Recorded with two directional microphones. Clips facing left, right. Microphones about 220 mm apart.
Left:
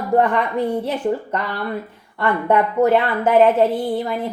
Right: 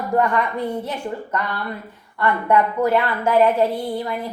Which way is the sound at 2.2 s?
20° left (ahead or behind).